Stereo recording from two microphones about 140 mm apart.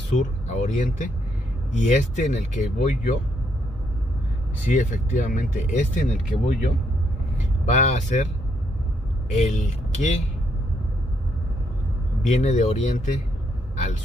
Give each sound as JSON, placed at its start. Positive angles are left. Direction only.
{"t": 0.2, "sound": "speech", "side_deg": 60}
{"t": 4.7, "sound": "speech", "side_deg": 65}
{"t": 7.3, "sound": "speech", "side_deg": 60}
{"t": 9.3, "sound": "speech", "side_deg": 60}
{"t": 12.2, "sound": "speech", "side_deg": 60}